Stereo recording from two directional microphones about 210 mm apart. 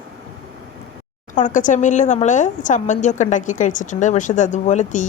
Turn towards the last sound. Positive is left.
turn(degrees=35)  # may be behind; listen again after turning